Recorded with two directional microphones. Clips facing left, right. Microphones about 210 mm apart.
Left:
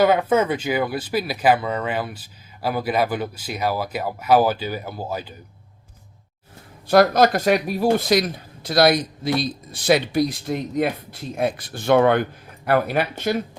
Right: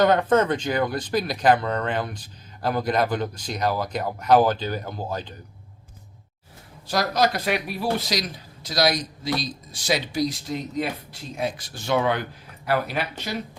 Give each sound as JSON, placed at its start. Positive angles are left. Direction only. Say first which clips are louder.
{"t": 0.0, "sound": "speech", "louder": "left 1 dB", "side_deg": 5}
{"t": 6.8, "sound": "speech", "louder": "left 7 dB", "side_deg": 55}